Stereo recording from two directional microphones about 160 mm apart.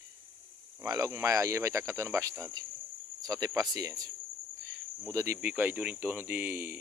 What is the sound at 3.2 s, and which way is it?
Speech, 20° right (ahead or behind).